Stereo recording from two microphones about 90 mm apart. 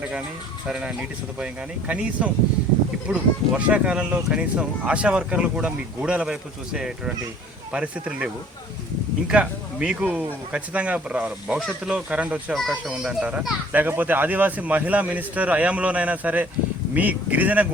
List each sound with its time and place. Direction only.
0.7 s speech: 15° right (ahead or behind)